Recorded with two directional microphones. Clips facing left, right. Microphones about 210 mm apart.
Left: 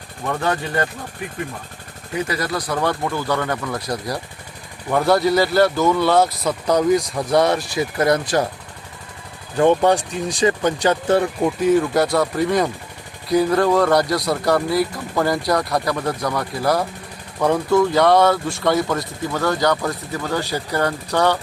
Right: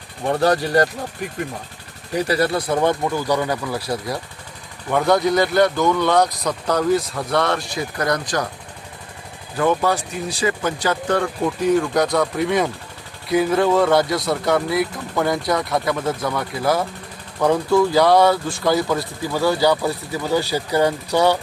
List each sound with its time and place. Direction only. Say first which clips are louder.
0.3 s speech: right 5 dB; 35° right (ahead or behind)
2.1 s speech: right 4 dB; 30° right (ahead or behind); by 8.4 s 25° left (ahead or behind)
9.6 s speech: left 4 dB; 30° left (ahead or behind)
11.2 s speech: left 2 dB; 10° left (ahead or behind); by 21.3 s 10° right (ahead or behind)